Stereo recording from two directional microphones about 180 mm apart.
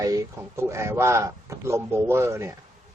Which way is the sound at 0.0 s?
20° right (ahead or behind).